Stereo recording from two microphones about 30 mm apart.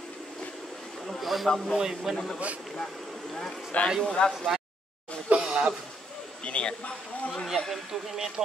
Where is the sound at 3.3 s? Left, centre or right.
Centre.